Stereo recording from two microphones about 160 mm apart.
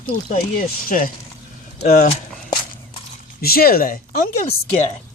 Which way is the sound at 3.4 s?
70° left (ahead or behind).